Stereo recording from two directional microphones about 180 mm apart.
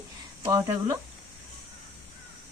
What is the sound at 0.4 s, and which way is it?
Speech, 20° right (ahead or behind).